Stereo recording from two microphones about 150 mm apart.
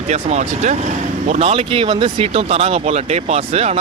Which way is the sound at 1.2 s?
40° right (ahead or behind).